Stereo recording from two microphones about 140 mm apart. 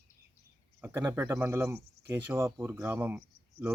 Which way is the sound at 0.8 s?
20° right (ahead or behind).